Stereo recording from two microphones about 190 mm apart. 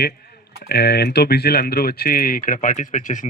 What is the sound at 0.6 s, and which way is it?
Speech, 55° left (ahead or behind).